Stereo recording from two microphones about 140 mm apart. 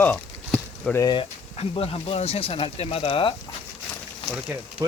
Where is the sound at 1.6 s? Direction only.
45° left (ahead or behind).